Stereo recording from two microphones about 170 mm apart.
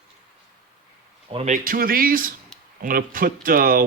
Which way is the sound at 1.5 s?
55° right (ahead or behind).